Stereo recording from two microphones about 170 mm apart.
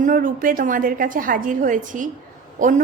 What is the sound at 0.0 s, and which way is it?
A woman's voice, 55° right (ahead or behind).